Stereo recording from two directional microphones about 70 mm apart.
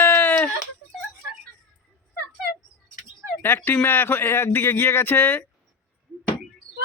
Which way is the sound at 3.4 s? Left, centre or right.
Left.